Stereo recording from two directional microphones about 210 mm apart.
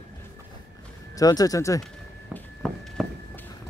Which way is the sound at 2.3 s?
5° left (ahead or behind).